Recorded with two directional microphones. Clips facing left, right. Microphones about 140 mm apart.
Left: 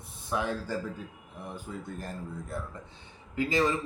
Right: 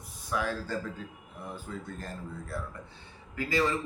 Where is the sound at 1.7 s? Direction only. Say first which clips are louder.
Left 2 dB; 10° left (ahead or behind).